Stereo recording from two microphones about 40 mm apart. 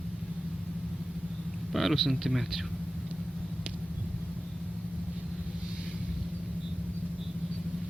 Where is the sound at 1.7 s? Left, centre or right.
Centre.